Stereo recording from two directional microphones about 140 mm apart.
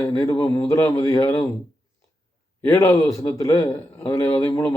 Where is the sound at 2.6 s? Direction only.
20° left (ahead or behind).